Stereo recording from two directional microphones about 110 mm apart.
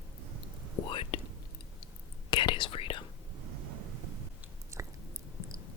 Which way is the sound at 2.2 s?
45° left (ahead or behind).